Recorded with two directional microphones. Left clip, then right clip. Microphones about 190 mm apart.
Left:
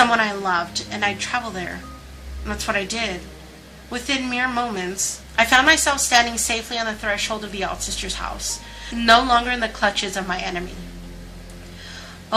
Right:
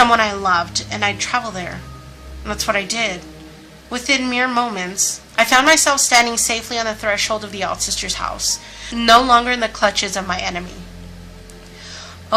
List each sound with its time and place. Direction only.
0.0 s a woman's voice: 30° right (ahead or behind)